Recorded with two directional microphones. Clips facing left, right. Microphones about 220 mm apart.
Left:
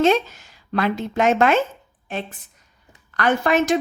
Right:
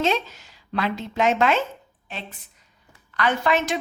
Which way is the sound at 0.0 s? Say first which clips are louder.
Left 6 dB; 50° left (ahead or behind).